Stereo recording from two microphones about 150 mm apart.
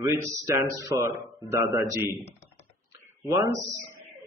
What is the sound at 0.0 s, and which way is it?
A man's voice, 20° right (ahead or behind).